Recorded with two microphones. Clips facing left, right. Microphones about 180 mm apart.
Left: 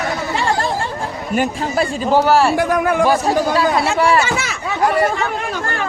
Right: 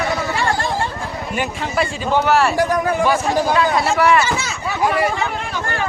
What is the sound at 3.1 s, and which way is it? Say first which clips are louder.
Speech: left 2 dB; 35° left (ahead or behind).